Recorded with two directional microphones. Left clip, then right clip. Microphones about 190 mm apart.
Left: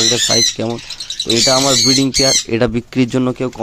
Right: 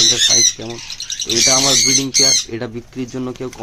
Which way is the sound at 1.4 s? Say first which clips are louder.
Left 1 dB; 30° left (ahead or behind).